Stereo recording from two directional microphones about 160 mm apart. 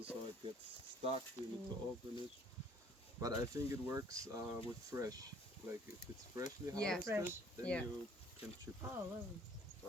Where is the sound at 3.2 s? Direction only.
20° right (ahead or behind).